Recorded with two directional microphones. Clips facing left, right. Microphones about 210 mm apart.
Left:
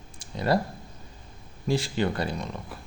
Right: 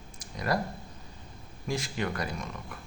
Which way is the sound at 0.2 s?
30° left (ahead or behind).